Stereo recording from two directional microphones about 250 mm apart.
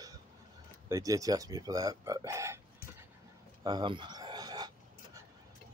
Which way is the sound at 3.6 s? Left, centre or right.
Centre.